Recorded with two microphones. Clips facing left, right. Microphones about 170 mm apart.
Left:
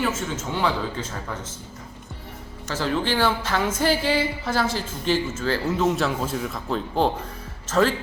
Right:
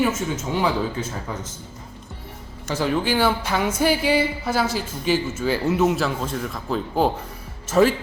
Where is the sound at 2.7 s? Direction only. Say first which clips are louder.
Right 2 dB; 10° right (ahead or behind).